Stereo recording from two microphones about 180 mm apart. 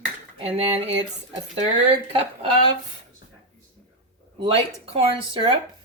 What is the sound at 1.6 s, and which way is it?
Speech, 30° right (ahead or behind).